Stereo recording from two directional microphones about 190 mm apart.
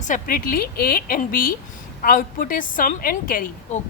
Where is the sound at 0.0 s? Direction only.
45° left (ahead or behind).